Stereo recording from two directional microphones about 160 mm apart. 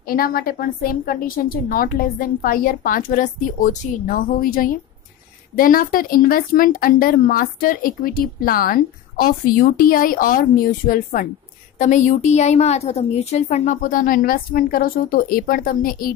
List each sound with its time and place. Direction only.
0.1 s speech: 65° left (ahead or behind)
11.8 s a woman's voice: 50° left (ahead or behind)
13.7 s speech: 60° left (ahead or behind)